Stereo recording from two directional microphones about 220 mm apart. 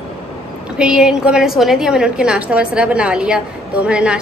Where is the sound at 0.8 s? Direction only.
5° right (ahead or behind).